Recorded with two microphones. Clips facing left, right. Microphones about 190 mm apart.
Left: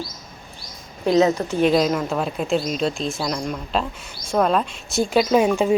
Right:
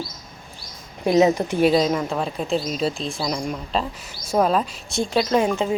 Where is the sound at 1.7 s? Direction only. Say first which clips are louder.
Left 1 dB; centre (ahead or behind).